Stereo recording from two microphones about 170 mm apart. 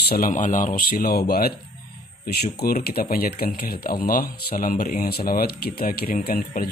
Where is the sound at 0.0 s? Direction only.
60° left (ahead or behind).